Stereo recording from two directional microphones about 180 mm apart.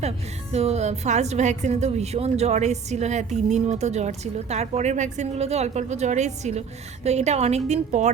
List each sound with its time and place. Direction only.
0.5 s a woman's voice: 35° right (ahead or behind)